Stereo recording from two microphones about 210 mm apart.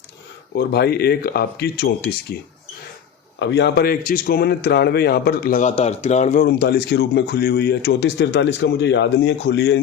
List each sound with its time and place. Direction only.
0.5 s a man's voice: 50° left (ahead or behind)
3.3 s a man's voice: 55° left (ahead or behind)